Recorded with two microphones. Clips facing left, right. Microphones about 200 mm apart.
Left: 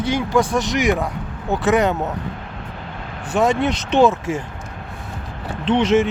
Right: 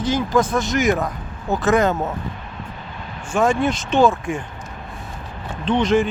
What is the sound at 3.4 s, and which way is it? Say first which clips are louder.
Speech: even; 20° left (ahead or behind).